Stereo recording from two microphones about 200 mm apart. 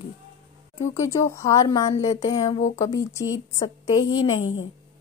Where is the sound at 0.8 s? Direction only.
15° left (ahead or behind).